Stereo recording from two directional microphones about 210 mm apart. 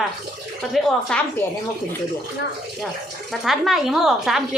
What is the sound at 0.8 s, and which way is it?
Speech, centre (ahead or behind).